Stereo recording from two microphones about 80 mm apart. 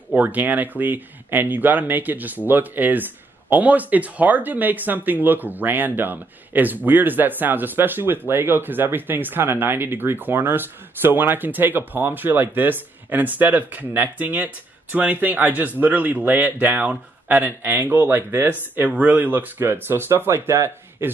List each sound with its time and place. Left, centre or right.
0.1 s speech: right